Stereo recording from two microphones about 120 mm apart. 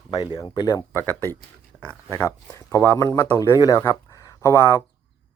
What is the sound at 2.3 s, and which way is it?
Speech, 25° left (ahead or behind).